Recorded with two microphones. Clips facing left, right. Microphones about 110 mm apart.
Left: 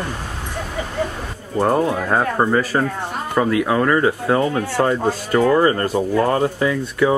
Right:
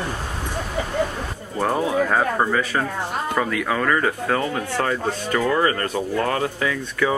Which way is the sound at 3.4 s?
10° left (ahead or behind).